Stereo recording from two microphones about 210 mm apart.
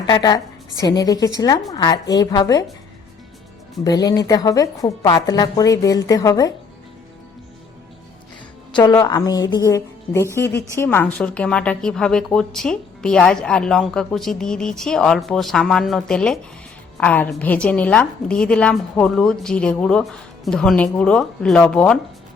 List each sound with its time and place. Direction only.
0.1 s a woman's voice: 20° left (ahead or behind)
3.8 s a woman's voice: 15° left (ahead or behind)
8.7 s a woman's voice: 20° left (ahead or behind); by 21.9 s 5° left (ahead or behind)